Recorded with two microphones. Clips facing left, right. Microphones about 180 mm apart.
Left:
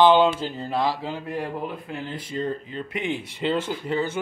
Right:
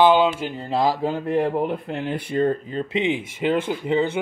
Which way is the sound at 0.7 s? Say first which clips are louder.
Right 4 dB; 30° right (ahead or behind).